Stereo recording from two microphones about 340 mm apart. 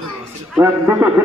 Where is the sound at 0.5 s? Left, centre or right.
Centre.